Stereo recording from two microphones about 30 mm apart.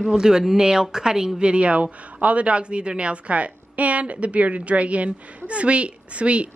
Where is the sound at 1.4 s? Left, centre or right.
Right.